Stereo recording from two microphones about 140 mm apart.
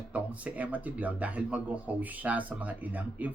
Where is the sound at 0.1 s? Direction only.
10° right (ahead or behind).